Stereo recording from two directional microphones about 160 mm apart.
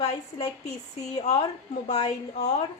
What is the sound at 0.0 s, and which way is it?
A woman's voice, 45° left (ahead or behind).